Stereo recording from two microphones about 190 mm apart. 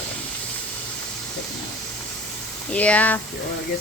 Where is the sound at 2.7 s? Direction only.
5° left (ahead or behind).